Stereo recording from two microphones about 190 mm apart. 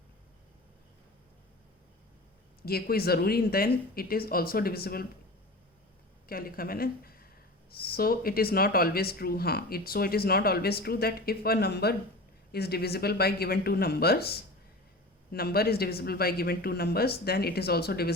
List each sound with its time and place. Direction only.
2.6 s speech: 55° left (ahead or behind)
6.2 s speech: 50° left (ahead or behind)